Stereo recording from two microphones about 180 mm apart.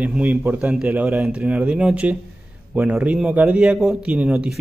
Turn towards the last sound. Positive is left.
turn(degrees=-5)  # may be behind; listen again after turning